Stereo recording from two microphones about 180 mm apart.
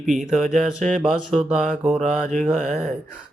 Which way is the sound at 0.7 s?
45° right (ahead or behind).